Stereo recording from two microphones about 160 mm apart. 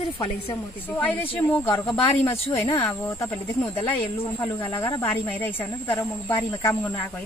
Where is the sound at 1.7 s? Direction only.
35° left (ahead or behind).